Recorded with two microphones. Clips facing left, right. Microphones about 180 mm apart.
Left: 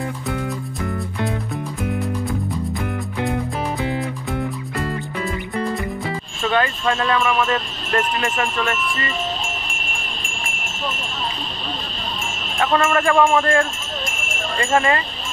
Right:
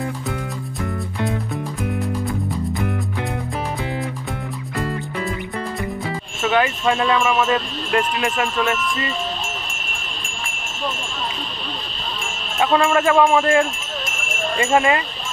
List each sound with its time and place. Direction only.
6.4 s speech: 10° right (ahead or behind)
12.5 s speech: 10° right (ahead or behind)